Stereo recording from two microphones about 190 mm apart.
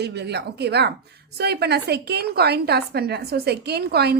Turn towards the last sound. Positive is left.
turn(degrees=-55)  # may be behind; listen again after turning